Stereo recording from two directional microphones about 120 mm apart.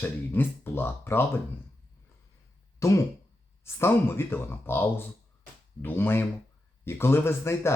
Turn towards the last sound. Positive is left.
turn(degrees=20)  # may be behind; listen again after turning